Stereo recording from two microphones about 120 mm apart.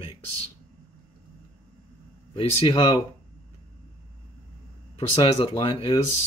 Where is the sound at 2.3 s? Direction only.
45° left (ahead or behind).